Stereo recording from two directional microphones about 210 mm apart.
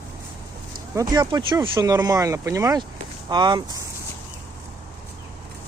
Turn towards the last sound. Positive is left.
turn(degrees=-20)  # may be behind; listen again after turning